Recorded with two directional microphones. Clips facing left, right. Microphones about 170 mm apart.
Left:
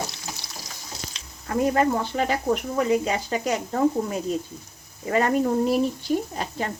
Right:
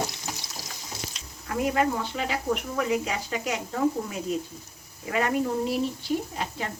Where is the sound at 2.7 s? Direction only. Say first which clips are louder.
Left 5 dB; 30° left (ahead or behind).